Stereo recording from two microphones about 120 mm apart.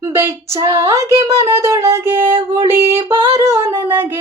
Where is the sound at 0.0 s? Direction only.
20° right (ahead or behind).